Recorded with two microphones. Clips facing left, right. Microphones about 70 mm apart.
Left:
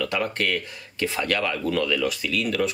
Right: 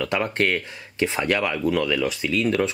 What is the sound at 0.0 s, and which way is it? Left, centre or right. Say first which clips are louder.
Speech: right 3 dB; right.